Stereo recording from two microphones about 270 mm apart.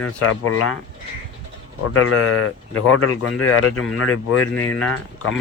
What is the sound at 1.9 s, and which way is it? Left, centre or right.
Speech, left.